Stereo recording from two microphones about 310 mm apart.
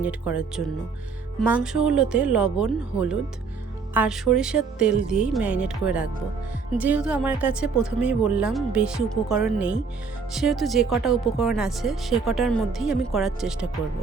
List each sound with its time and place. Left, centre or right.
0.0 s speech: centre